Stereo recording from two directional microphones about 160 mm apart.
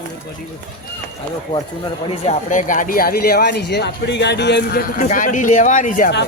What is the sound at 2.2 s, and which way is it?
Speech, 55° left (ahead or behind).